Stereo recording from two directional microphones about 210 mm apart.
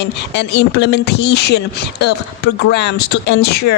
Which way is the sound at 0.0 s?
55° left (ahead or behind).